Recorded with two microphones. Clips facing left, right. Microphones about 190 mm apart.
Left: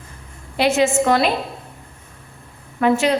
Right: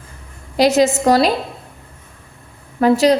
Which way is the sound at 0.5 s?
40° right (ahead or behind).